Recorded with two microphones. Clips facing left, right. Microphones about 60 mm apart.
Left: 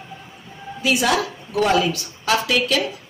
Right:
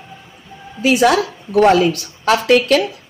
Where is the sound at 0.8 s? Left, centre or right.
Right.